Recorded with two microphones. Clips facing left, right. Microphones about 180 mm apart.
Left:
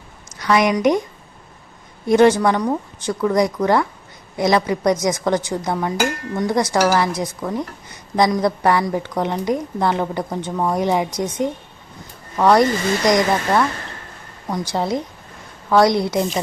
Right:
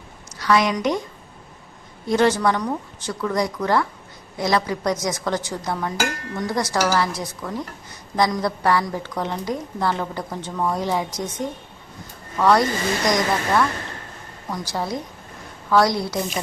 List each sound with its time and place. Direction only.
0.3 s a woman's voice: 20° left (ahead or behind)
2.0 s a woman's voice: 15° left (ahead or behind)